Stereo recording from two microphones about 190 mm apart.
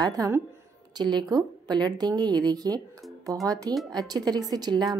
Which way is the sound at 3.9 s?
20° right (ahead or behind).